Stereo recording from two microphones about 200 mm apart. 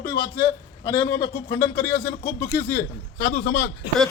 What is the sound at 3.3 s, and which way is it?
Speech, 55° left (ahead or behind).